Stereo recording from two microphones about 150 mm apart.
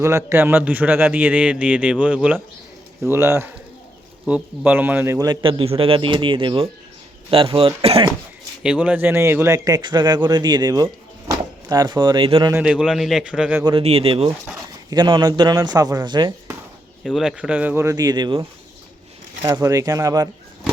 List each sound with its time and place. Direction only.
0.0 s a man's voice: 20° right (ahead or behind); by 8.0 s 40° right (ahead or behind)
8.6 s speech: 10° right (ahead or behind); by 12.5 s 35° right (ahead or behind)
12.5 s a man's voice: 5° right (ahead or behind)
13.7 s a man's voice: 40° right (ahead or behind)
17.0 s a man's voice: centre (ahead or behind)
17.8 s speech: 25° right (ahead or behind)